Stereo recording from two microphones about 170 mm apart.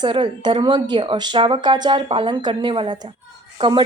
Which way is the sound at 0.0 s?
25° right (ahead or behind).